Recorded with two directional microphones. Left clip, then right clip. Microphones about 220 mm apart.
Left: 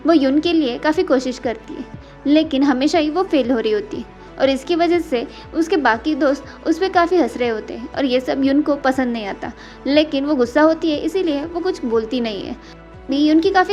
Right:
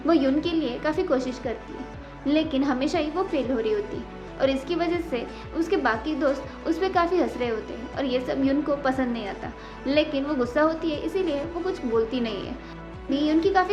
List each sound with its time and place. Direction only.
0.0 s a woman's voice: 30° left (ahead or behind)